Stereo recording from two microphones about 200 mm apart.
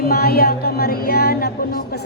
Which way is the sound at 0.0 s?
50° left (ahead or behind).